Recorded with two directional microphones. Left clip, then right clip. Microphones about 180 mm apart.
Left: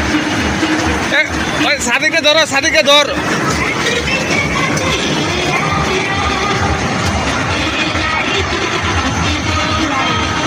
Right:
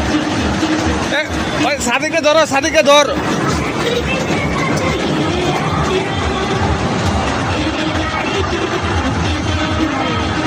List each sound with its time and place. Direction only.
2.2 s speech: 30° right (ahead or behind)